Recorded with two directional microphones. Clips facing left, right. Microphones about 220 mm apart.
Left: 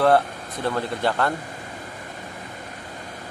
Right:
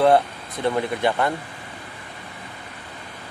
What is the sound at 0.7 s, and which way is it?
Speech, 20° right (ahead or behind).